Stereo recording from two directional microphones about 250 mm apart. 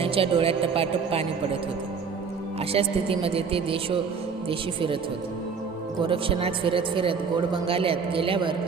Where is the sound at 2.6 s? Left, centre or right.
Right.